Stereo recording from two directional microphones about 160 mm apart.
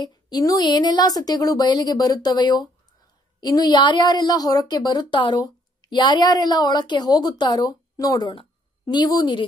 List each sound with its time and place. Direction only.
0.0 s a woman's voice: 25° left (ahead or behind)